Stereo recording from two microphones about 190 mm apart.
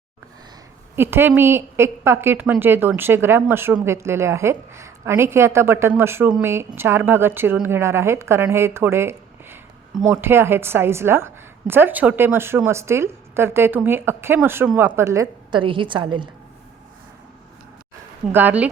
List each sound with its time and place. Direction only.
0.9 s a woman's voice: 10° right (ahead or behind)
18.3 s a woman's voice: 10° right (ahead or behind)